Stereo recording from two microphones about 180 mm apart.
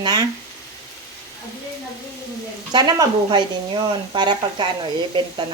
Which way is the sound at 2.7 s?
25° right (ahead or behind).